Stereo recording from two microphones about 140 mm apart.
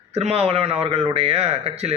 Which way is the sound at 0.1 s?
50° right (ahead or behind).